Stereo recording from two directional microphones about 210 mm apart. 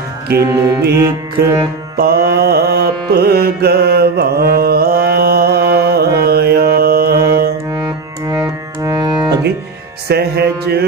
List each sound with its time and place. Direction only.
0.3 s music: 15° right (ahead or behind)
2.0 s music: 45° right (ahead or behind)
7.2 s music: 15° right (ahead or behind)
10.0 s mantra: 50° right (ahead or behind)